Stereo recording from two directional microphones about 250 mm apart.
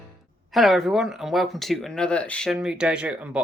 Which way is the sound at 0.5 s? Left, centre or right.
Centre.